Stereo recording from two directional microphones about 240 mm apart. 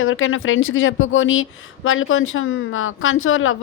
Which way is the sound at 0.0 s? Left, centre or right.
Left.